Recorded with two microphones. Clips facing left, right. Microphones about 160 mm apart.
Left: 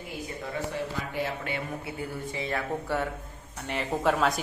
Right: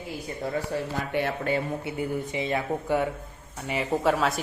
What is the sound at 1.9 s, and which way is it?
Speech, 20° right (ahead or behind).